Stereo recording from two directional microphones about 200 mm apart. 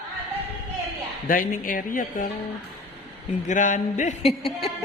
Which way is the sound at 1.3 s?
45° left (ahead or behind).